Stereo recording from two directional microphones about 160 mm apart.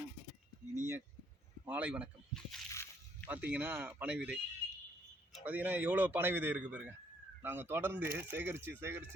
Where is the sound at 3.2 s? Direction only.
10° right (ahead or behind).